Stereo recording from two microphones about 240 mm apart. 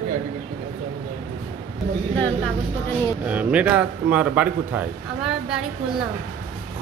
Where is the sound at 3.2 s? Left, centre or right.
Centre.